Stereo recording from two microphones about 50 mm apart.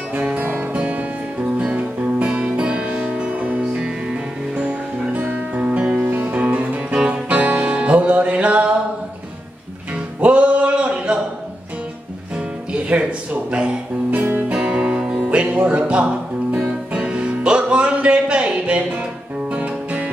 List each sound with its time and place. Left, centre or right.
0.4 s music: right
0.7 s music: right
10.2 s a sound: right
12.7 s a sound: right
14.1 s music: right
14.6 s music: centre
15.2 s music: right